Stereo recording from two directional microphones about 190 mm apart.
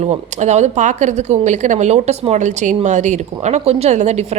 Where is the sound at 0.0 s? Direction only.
35° right (ahead or behind).